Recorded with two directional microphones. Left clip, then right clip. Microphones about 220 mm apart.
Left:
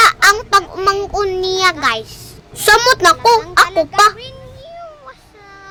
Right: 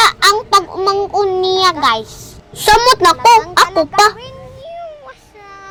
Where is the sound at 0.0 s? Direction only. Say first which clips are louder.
Left 1 dB; 5° right (ahead or behind).